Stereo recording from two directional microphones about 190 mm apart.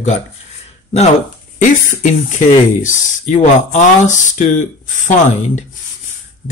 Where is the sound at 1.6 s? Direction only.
40° left (ahead or behind).